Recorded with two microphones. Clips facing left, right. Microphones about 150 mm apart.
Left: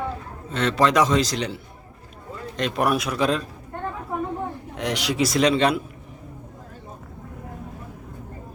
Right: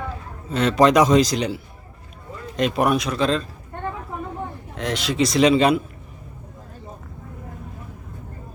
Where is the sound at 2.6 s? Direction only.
Centre (ahead or behind).